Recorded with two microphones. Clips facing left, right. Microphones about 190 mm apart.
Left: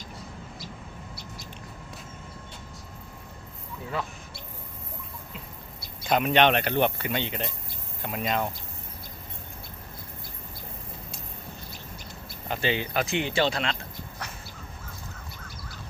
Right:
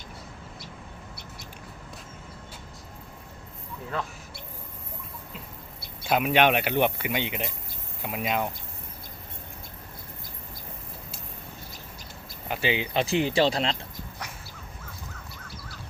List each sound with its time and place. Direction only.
6.1 s speech: 5° right (ahead or behind)
12.5 s speech: 15° right (ahead or behind)
12.9 s speech: 30° right (ahead or behind)